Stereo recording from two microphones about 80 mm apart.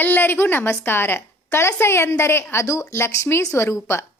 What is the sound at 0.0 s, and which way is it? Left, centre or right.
A woman's voice, left.